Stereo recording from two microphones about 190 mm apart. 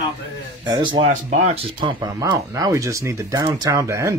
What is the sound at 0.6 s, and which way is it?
Speech, 25° right (ahead or behind).